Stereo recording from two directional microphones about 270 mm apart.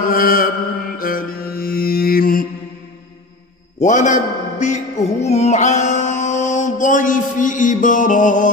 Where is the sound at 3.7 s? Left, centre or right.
Left.